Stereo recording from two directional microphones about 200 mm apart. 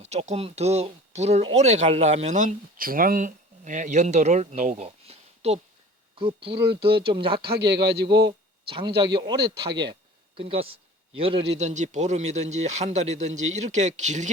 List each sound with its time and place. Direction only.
0.0 s speech: 35° right (ahead or behind)
6.6 s a man's voice: 55° right (ahead or behind)
6.8 s speech: 25° right (ahead or behind)
7.3 s a man's voice: 55° right (ahead or behind)
9.4 s a man's voice: 55° right (ahead or behind)
10.3 s speech: 30° right (ahead or behind)